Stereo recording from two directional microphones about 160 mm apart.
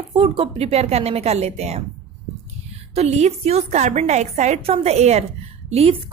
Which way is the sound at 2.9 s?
40° right (ahead or behind).